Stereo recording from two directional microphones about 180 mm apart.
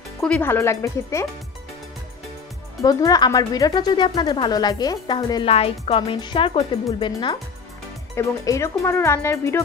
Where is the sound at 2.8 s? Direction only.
20° left (ahead or behind).